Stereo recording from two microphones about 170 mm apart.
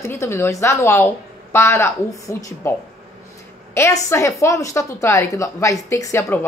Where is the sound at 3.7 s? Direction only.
15° left (ahead or behind).